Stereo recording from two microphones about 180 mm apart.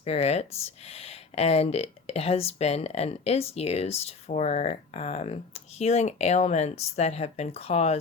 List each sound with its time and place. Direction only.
0.0 s speech: 35° left (ahead or behind)